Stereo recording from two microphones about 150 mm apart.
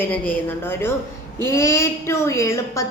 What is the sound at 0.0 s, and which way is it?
A woman's voice, 10° left (ahead or behind).